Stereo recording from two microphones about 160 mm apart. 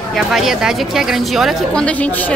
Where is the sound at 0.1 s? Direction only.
Centre (ahead or behind).